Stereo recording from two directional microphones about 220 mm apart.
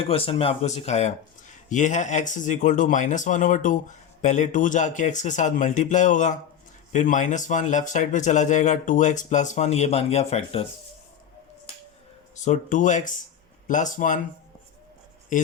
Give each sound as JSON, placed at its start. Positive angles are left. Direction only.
{"t": 0.1, "sound": "speech", "side_deg": 25}
{"t": 12.4, "sound": "speech", "side_deg": 35}